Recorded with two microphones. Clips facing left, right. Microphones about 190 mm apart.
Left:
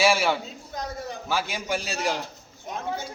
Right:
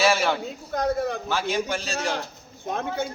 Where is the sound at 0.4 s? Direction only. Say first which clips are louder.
Right 9 dB; 60° right (ahead or behind).